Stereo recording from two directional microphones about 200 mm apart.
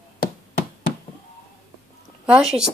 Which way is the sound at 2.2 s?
5° right (ahead or behind).